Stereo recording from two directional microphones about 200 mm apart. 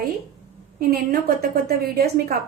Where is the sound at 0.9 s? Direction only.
50° right (ahead or behind).